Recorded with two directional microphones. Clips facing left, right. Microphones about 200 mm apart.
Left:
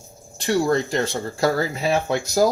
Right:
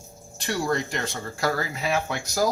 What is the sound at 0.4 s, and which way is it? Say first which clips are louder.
Speech: left 6 dB; 30° left (ahead or behind).